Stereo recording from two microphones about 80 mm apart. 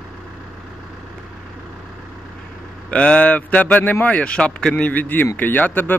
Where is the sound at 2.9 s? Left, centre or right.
Centre.